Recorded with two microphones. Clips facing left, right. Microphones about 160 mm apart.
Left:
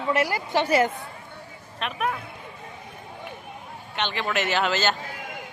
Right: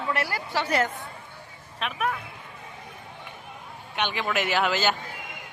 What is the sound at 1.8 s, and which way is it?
Speech, centre (ahead or behind).